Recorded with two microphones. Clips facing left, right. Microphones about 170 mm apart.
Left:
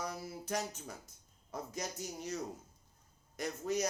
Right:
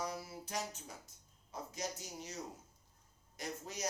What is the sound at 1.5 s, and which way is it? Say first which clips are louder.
Speech: left 2 dB; 50° left (ahead or behind).